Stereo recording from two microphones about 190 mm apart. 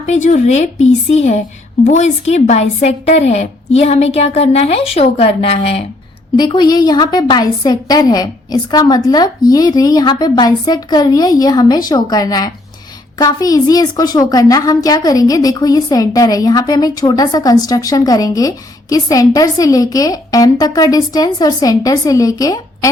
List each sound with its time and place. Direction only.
0.0 s a woman's voice: 40° left (ahead or behind); by 22.9 s 20° left (ahead or behind)